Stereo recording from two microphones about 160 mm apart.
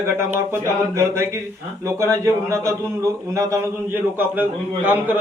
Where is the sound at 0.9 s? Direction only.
20° right (ahead or behind).